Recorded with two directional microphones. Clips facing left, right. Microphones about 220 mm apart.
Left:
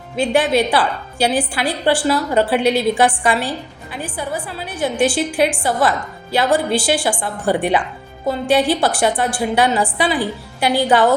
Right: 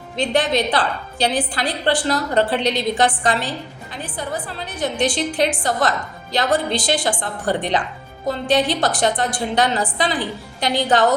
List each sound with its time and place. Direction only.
0.2 s a woman's voice: 10° left (ahead or behind)